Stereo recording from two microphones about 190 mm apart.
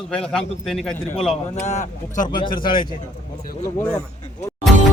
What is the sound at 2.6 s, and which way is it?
Speech, 25° left (ahead or behind).